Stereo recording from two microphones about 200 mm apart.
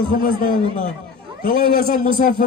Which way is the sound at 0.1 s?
40° left (ahead or behind).